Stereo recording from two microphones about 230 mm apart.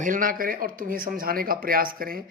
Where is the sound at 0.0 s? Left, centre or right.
Right.